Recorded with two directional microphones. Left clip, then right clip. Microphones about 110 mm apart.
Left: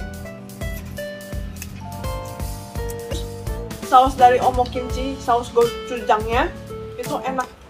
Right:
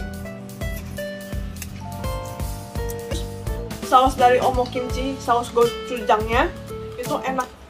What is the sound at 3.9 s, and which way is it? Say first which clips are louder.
Speech: left 2 dB; 20° right (ahead or behind).